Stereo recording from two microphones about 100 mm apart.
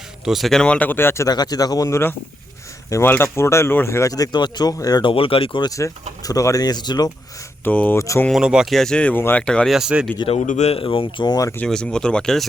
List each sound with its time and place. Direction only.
0.3 s speech: centre (ahead or behind); by 1.3 s 25° left (ahead or behind)
1.3 s speech: 40° left (ahead or behind)
5.0 s speech: 65° left (ahead or behind)
5.6 s speech: 35° left (ahead or behind)
7.6 s speech: 15° left (ahead or behind)
7.9 s speech: 30° left (ahead or behind)
8.3 s speech: 5° right (ahead or behind)
9.7 s speech: 5° right (ahead or behind)
10.2 s a man's voice: 90° left
10.8 s speech: 60° left (ahead or behind)
11.5 s speech: 10° left (ahead or behind)